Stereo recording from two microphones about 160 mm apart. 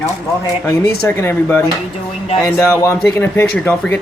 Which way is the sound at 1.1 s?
15° left (ahead or behind).